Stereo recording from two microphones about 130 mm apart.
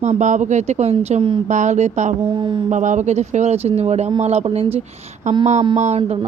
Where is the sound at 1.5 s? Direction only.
70° right (ahead or behind).